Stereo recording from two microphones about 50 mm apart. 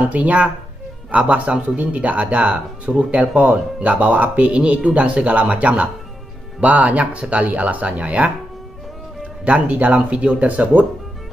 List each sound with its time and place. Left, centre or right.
0.1 s speech: right
4.5 s speech: right